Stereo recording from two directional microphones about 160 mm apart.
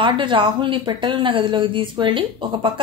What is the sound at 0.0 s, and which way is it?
Speech, 30° right (ahead or behind).